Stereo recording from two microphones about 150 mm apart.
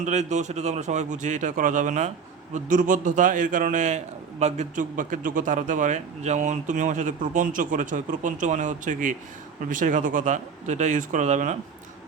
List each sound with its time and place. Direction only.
0.0 s speech: 50° right (ahead or behind)